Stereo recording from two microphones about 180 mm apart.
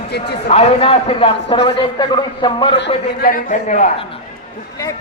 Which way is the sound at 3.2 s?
50° left (ahead or behind).